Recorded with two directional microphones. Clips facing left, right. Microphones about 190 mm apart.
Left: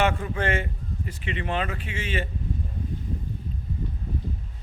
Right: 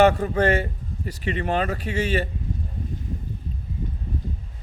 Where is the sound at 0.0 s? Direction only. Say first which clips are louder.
Right 7 dB; 40° right (ahead or behind).